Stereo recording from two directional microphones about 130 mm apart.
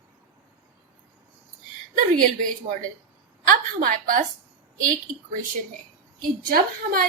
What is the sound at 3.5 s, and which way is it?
Speech, 90° right.